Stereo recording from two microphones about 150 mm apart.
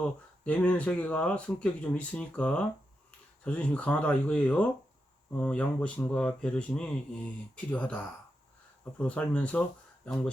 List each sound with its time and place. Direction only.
0.0 s speech: 10° left (ahead or behind)